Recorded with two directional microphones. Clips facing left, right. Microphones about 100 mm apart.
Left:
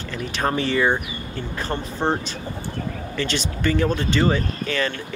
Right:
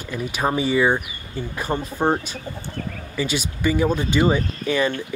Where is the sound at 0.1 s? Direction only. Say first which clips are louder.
Right 1 dB; 10° right (ahead or behind).